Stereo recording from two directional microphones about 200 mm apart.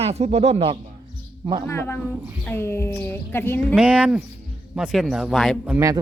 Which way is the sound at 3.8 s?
5° right (ahead or behind).